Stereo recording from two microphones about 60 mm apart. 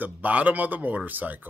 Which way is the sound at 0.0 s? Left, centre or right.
Right.